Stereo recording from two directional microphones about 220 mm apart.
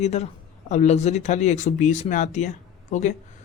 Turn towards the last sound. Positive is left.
turn(degrees=35)  # may be behind; listen again after turning